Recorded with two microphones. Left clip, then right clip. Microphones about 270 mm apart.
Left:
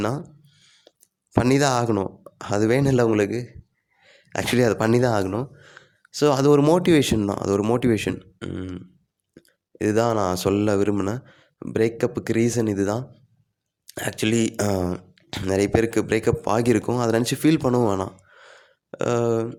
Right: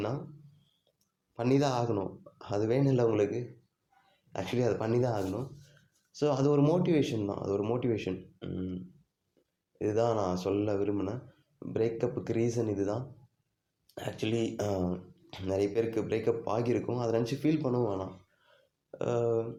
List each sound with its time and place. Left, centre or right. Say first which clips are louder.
0.9 s speech: left 18 dB; left